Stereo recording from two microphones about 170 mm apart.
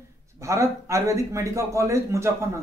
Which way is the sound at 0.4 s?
15° right (ahead or behind).